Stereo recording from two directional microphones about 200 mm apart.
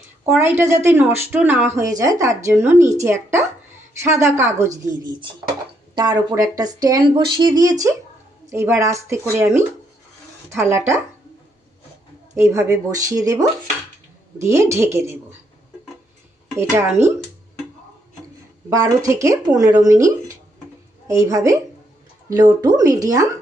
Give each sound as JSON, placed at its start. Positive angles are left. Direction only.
{"t": 0.3, "sound": "a woman's voice", "side_deg": -10}
{"t": 12.3, "sound": "a woman's voice", "side_deg": -15}
{"t": 16.6, "sound": "a woman's voice", "side_deg": -15}
{"t": 18.7, "sound": "a woman's voice", "side_deg": -15}